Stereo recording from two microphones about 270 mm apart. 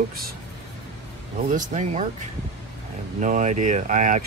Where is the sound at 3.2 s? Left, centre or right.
Right.